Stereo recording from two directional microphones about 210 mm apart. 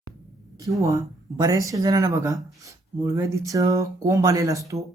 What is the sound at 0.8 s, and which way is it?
Speech, 15° right (ahead or behind).